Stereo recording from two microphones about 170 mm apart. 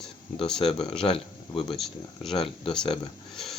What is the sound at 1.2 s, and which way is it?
Speech, 30° left (ahead or behind).